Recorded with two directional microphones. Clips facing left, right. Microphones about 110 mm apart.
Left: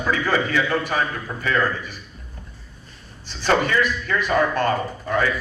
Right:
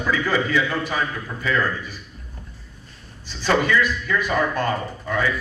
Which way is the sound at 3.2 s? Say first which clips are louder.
Even; 50° left (ahead or behind).